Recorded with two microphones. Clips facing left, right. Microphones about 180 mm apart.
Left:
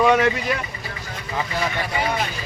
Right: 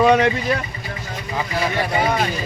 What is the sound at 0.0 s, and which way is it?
Speech, 25° right (ahead or behind).